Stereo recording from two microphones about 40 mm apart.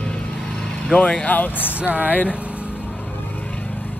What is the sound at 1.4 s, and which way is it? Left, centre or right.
Speech, left.